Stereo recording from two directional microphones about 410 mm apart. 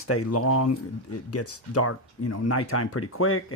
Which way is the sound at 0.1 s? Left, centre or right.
Left.